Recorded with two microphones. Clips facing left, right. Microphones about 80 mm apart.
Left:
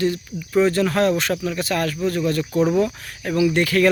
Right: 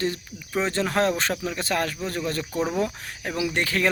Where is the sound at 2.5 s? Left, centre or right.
Centre.